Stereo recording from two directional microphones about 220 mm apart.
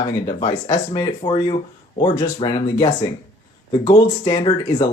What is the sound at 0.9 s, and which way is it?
Speech, 20° left (ahead or behind).